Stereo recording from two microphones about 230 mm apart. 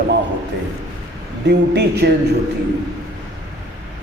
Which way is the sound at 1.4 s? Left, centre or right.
Right.